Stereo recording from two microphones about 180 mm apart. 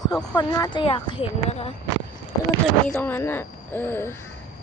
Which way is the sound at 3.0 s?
10° left (ahead or behind).